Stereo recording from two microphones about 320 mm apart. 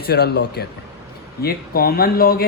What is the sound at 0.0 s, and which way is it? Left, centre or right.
Speech, left.